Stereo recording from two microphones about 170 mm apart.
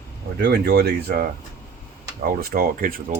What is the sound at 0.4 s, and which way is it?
Speech, 70° right (ahead or behind).